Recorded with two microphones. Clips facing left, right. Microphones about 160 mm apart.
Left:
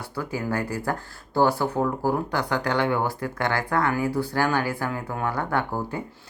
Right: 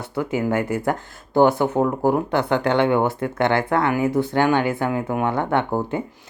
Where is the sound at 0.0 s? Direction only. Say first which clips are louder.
Right 7 dB; 20° right (ahead or behind).